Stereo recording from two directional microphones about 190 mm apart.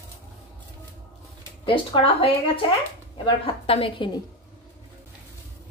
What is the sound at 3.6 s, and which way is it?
Speech, 30° left (ahead or behind).